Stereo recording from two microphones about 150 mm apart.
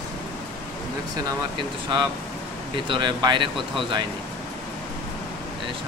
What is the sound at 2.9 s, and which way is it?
Speech, 30° right (ahead or behind).